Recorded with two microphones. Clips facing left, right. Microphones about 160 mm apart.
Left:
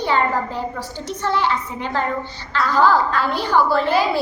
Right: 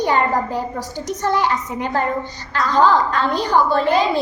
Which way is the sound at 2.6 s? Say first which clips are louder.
Right 1 dB; 20° right (ahead or behind).